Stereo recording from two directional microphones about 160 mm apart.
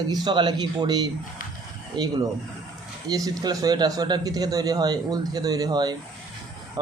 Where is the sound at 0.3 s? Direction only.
25° right (ahead or behind).